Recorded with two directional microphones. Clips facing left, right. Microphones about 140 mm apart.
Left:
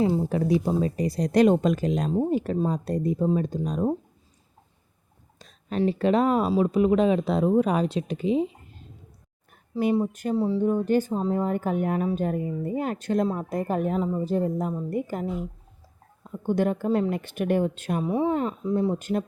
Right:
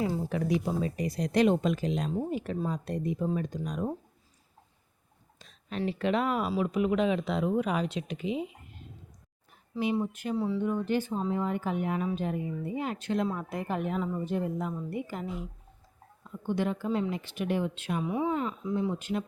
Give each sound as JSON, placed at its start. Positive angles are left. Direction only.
{"t": 0.0, "sound": "speech", "side_deg": 30}
{"t": 5.4, "sound": "speech", "side_deg": 40}
{"t": 14.8, "sound": "speech", "side_deg": 45}